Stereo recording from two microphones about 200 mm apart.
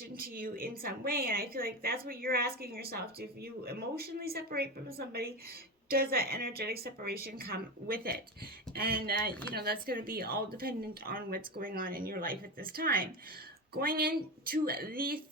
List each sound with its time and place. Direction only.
0.2 s a woman's voice: 45° right (ahead or behind)